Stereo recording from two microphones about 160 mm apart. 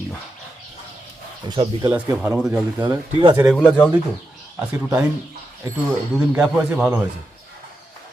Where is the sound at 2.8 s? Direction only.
25° right (ahead or behind).